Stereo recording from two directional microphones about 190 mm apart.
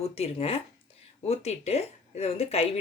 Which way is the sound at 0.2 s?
30° left (ahead or behind).